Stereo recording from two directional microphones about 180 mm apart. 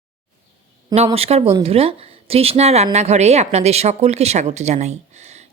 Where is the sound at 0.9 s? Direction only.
35° right (ahead or behind).